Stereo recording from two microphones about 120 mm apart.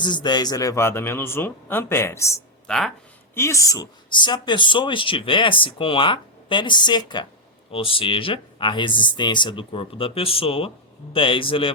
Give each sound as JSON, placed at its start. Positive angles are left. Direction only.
{"t": 0.0, "sound": "speech", "side_deg": 40}
{"t": 2.6, "sound": "speech", "side_deg": 0}
{"t": 3.3, "sound": "speech", "side_deg": 25}
{"t": 7.7, "sound": "speech", "side_deg": 50}